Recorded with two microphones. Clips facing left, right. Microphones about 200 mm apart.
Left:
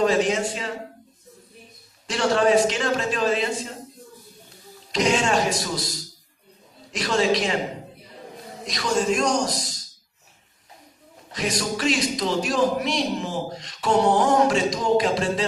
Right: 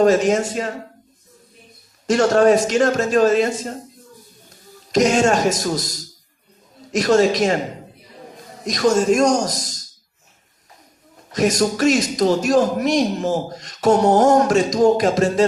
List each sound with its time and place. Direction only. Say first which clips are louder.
0.0 s a man's voice: right 6 dB; 45° right (ahead or behind)
2.0 s a man's voice: right 6 dB; 45° right (ahead or behind)
4.9 s a man's voice: right 6 dB; 45° right (ahead or behind)
8.6 s a man's voice: right 7 dB; 45° right (ahead or behind)
11.3 s a man's voice: right 8 dB; 45° right (ahead or behind)